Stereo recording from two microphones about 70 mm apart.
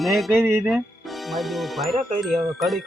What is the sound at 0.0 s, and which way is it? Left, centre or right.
Speech, centre.